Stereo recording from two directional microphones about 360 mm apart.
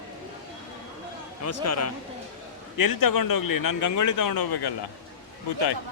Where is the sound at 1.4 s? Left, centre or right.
Left.